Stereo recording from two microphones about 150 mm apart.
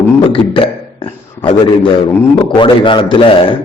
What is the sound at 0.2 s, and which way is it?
A man's voice, 35° left (ahead or behind).